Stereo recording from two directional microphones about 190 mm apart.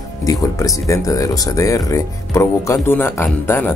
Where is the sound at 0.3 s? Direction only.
15° left (ahead or behind).